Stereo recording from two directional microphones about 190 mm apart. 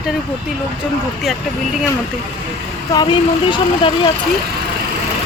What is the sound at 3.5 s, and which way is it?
Speech, 25° left (ahead or behind).